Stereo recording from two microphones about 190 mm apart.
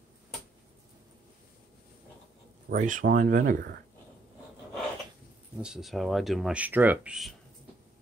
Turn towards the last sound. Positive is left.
turn(degrees=-5)  # may be behind; listen again after turning